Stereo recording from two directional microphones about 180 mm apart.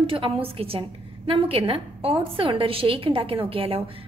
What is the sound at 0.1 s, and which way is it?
A woman's voice, 30° right (ahead or behind).